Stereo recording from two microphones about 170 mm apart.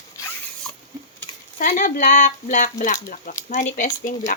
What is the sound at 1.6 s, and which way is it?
Speech, 50° left (ahead or behind).